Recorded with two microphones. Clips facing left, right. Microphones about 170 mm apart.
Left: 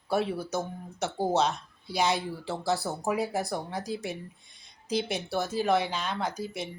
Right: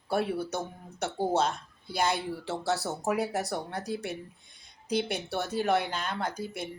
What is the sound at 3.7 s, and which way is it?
Speech, 65° right (ahead or behind).